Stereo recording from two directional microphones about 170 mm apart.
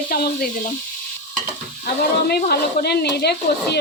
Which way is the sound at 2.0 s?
70° left (ahead or behind).